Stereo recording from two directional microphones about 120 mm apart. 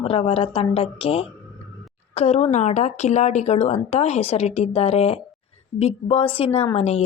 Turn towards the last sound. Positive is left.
turn(degrees=65)  # may be behind; listen again after turning